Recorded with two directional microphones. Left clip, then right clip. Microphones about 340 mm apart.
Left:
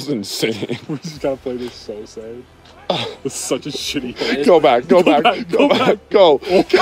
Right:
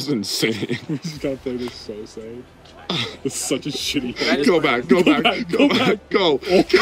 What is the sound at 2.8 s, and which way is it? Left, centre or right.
Speech, centre.